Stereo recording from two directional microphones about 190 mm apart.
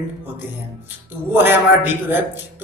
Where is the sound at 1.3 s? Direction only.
10° right (ahead or behind).